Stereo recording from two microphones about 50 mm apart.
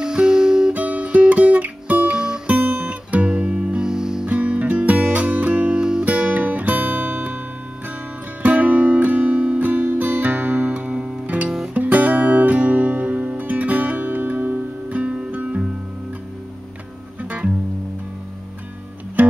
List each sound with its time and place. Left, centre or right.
0.0 s music: centre
0.7 s music: right
1.0 s music: centre
1.3 s music: right; by 2.4 s centre
2.4 s music: right
4.3 s music: right
5.8 s music: centre
6.0 s guitar: right
8.4 s music: right
10.7 s music: right
17.2 s music: right
19.2 s music: right